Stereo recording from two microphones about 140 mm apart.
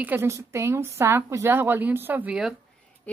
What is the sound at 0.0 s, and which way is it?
A woman's voice, 15° right (ahead or behind).